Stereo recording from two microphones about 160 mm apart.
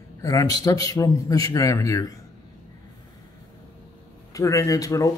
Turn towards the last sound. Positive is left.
turn(degrees=20)  # may be behind; listen again after turning